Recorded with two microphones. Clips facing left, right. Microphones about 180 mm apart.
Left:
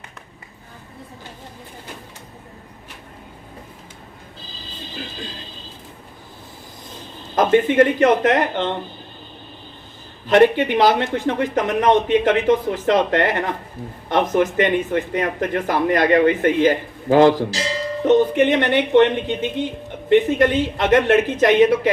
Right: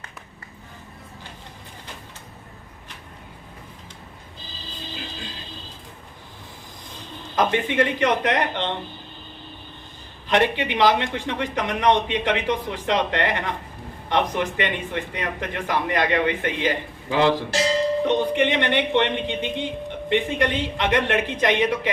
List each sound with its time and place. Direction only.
7.3 s a man's voice: 45° left (ahead or behind)
10.2 s a man's voice: 45° left (ahead or behind)